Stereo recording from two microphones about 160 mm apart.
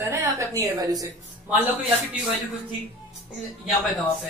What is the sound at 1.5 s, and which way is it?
Speech, 5° right (ahead or behind).